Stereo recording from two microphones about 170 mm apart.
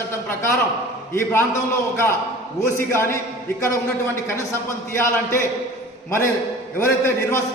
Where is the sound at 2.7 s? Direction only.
15° left (ahead or behind).